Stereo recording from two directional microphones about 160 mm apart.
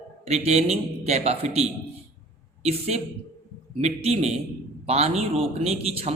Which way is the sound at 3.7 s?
40° right (ahead or behind).